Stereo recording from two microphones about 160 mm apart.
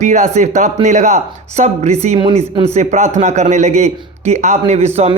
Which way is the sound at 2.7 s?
45° right (ahead or behind).